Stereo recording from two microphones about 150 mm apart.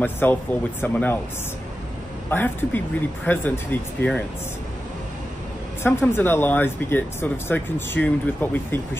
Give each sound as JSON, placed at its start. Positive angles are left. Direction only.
{"t": 0.0, "sound": "speech", "side_deg": 15}
{"t": 2.2, "sound": "speech", "side_deg": 15}
{"t": 5.9, "sound": "speech", "side_deg": 15}